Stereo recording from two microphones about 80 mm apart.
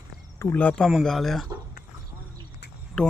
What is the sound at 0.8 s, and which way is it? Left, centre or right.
Speech, centre.